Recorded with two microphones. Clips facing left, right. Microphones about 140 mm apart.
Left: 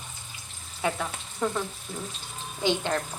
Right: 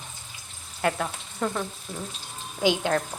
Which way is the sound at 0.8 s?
Centre (ahead or behind).